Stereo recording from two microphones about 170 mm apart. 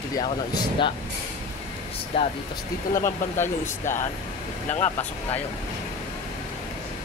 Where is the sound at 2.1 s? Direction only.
30° left (ahead or behind).